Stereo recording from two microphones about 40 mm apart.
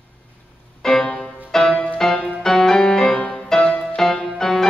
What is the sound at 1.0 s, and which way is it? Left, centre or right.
Music, centre.